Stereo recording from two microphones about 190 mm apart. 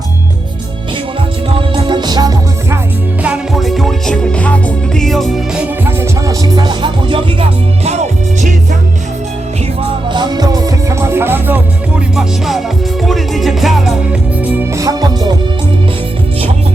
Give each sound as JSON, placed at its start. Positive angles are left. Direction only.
{"t": 1.5, "sound": "music", "side_deg": -30}
{"t": 3.2, "sound": "music", "side_deg": -5}
{"t": 5.8, "sound": "music", "side_deg": -15}
{"t": 7.9, "sound": "music", "side_deg": -35}
{"t": 10.1, "sound": "music", "side_deg": -25}